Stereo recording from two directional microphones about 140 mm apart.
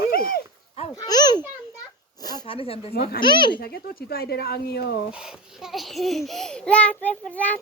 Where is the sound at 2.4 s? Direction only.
40° left (ahead or behind).